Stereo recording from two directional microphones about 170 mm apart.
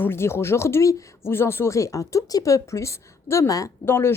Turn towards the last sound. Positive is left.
turn(degrees=15)  # may be behind; listen again after turning